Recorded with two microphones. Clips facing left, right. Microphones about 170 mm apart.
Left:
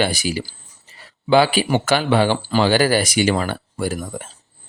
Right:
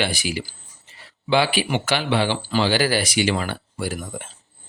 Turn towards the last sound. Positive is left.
turn(degrees=40)  # may be behind; listen again after turning